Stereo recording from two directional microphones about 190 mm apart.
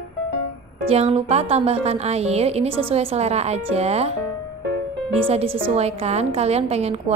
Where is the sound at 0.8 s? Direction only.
30° right (ahead or behind).